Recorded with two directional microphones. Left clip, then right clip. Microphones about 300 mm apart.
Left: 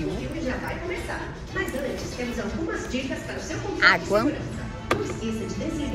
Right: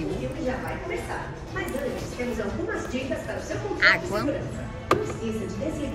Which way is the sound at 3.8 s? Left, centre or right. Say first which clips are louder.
Left 2 dB; centre.